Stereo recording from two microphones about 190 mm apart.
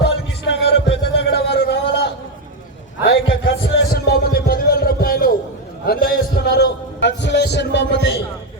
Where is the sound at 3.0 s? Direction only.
55° left (ahead or behind).